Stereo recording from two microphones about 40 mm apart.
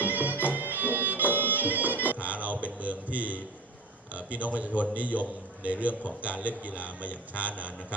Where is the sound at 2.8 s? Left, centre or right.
Right.